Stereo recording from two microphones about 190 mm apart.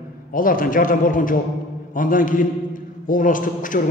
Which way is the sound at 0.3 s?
45° left (ahead or behind).